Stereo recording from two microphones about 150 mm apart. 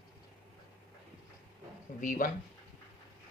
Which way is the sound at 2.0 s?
65° left (ahead or behind).